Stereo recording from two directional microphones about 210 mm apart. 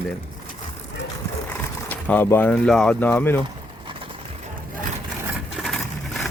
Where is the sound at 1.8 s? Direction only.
10° left (ahead or behind).